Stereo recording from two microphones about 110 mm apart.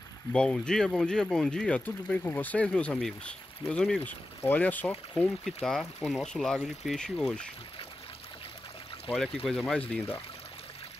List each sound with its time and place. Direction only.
0.3 s speech: 5° left (ahead or behind)
9.1 s speech: 5° left (ahead or behind)
9.9 s speech: 15° left (ahead or behind)